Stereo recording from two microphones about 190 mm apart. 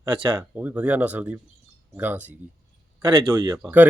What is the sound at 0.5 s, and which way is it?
Speech, 5° right (ahead or behind).